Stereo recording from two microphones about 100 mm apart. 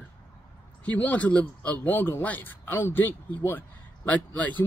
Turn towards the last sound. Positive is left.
turn(degrees=20)  # may be behind; listen again after turning